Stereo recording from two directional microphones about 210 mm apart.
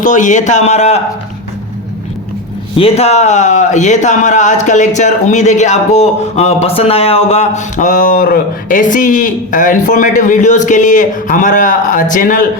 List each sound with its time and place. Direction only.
0.0 s speech: 35° left (ahead or behind)
2.7 s speech: 30° left (ahead or behind)